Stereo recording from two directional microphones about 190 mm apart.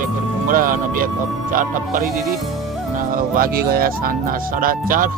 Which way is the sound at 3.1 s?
50° right (ahead or behind).